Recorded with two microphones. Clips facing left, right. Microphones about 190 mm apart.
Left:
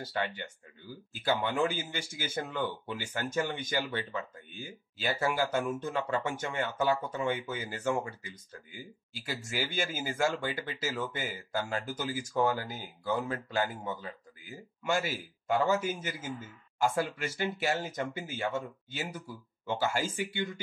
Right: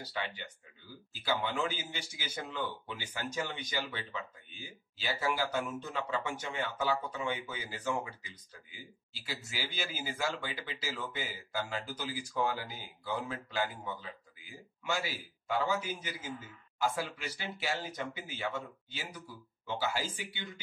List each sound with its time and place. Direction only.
0.0 s speech: 50° left (ahead or behind)
9.1 s speech: 45° left (ahead or behind)
14.4 s speech: 45° left (ahead or behind)